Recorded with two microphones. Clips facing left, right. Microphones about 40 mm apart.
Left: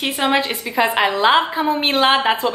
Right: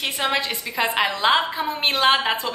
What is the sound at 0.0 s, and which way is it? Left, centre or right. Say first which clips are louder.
A woman's voice: left 5 dB; centre.